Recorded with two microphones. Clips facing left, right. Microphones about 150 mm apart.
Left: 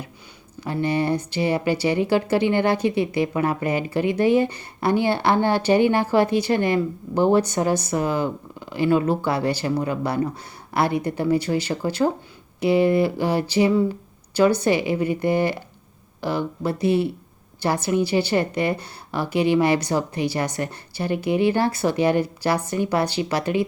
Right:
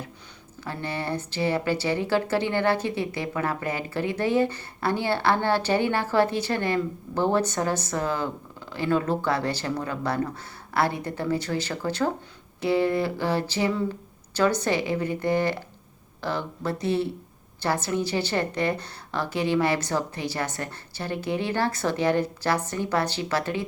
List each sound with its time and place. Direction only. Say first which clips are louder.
0.6 s speech: left 8 dB; 15° left (ahead or behind)